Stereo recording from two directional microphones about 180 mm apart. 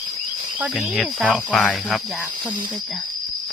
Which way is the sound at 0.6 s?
5° right (ahead or behind).